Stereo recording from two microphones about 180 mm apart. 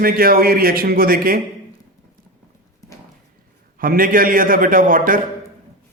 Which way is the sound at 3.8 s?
50° right (ahead or behind).